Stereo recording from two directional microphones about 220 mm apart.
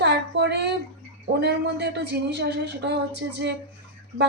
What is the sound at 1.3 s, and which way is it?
A woman's voice, 50° right (ahead or behind).